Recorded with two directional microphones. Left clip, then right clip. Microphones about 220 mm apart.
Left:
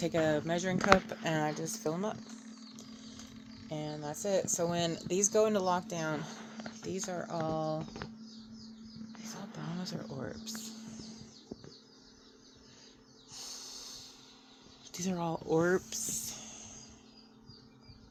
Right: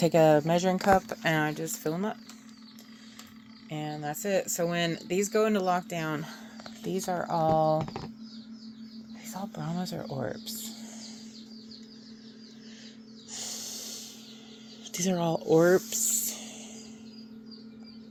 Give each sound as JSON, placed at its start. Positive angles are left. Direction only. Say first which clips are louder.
{"t": 0.0, "sound": "speech", "louder": "right 9 dB", "side_deg": -10}
{"t": 1.1, "sound": "speech", "louder": "right 5 dB", "side_deg": 15}
{"t": 3.7, "sound": "speech", "louder": "right 5 dB", "side_deg": 25}
{"t": 9.8, "sound": "speech", "louder": "right 8 dB", "side_deg": 25}
{"t": 13.3, "sound": "snake", "louder": "right 7 dB", "side_deg": 10}
{"t": 14.9, "sound": "speech", "louder": "right 8 dB", "side_deg": 15}
{"t": 16.1, "sound": "a sound", "louder": "right 7 dB", "side_deg": 15}